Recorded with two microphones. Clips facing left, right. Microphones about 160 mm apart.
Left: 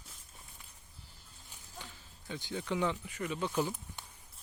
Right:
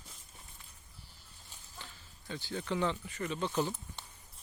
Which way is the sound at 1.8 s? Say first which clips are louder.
Left 1 dB; 15° left (ahead or behind).